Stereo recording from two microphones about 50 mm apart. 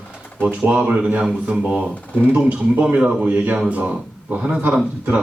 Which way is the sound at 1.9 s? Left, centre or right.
Left.